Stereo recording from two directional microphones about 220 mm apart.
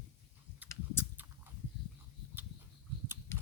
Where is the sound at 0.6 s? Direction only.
10° left (ahead or behind).